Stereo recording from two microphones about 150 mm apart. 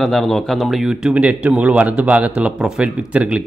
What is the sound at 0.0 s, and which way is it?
Speech, centre (ahead or behind).